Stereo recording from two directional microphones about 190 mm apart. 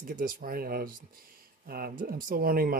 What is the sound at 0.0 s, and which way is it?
Speech, 45° right (ahead or behind).